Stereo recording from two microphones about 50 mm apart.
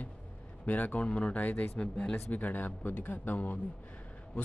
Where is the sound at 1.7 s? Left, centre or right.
Centre.